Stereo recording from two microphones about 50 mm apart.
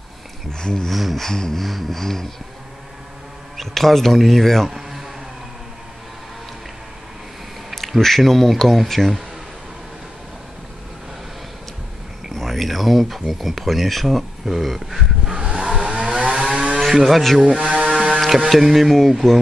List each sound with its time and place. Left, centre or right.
0.5 s a sound: centre
0.8 s speech: centre
1.2 s a sound: centre
1.6 s speech: centre
3.5 s speech: centre
7.7 s speech: centre
12.4 s speech: centre
15.3 s vehicle: centre
16.8 s music: centre
17.4 s a sound: centre
18.2 s speech: centre